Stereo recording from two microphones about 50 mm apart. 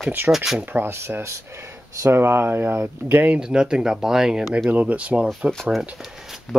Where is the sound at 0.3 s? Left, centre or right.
Centre.